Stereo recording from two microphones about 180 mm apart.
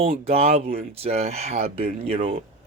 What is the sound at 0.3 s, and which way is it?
Speech, 35° right (ahead or behind).